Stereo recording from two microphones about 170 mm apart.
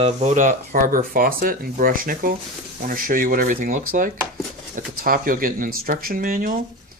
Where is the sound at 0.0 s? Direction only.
40° right (ahead or behind).